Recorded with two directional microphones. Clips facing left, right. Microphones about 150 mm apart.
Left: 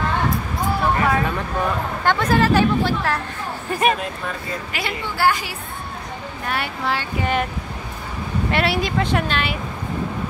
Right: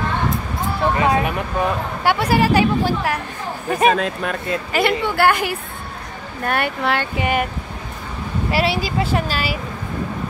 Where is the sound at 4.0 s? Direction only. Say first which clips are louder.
Right 5 dB; 75° right (ahead or behind).